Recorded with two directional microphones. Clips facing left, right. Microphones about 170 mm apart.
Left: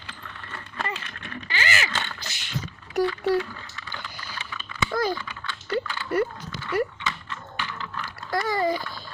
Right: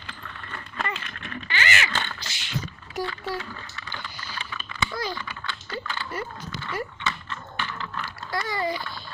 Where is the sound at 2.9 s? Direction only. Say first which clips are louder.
Left 8 dB; 65° left (ahead or behind).